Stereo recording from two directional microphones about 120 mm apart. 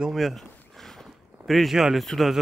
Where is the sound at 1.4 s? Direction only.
Centre (ahead or behind).